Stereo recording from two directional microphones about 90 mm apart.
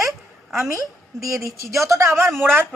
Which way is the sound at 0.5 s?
35° right (ahead or behind).